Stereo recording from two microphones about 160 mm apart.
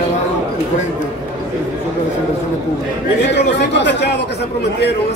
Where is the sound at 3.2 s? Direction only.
90° left.